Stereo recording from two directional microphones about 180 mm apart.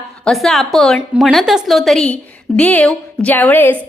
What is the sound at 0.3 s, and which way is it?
A woman's voice, centre (ahead or behind).